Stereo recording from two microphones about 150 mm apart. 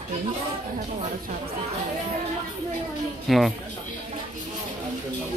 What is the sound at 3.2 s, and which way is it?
Speech, centre (ahead or behind).